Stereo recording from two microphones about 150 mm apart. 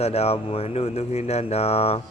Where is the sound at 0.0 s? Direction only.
45° left (ahead or behind).